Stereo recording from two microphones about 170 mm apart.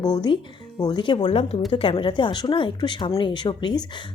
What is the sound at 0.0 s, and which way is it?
Speech, 25° left (ahead or behind).